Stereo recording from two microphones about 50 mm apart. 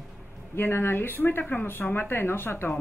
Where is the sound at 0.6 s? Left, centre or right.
Left.